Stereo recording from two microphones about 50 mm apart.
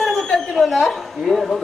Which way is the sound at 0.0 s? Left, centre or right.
Centre.